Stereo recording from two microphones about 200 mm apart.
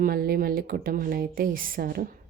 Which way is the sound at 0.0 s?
50° right (ahead or behind).